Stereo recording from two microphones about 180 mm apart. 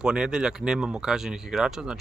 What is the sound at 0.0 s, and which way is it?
Speech, 5° right (ahead or behind).